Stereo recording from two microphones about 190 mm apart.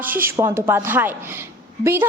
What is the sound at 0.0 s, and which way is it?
A woman's voice, 10° right (ahead or behind).